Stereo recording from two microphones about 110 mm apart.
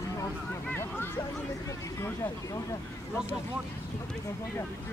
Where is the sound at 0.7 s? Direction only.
20° left (ahead or behind).